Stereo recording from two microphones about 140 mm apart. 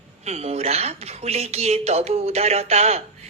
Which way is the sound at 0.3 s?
50° right (ahead or behind).